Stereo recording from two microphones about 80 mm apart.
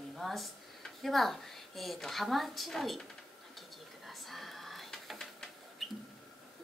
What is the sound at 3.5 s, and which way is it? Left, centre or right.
Whispering, centre.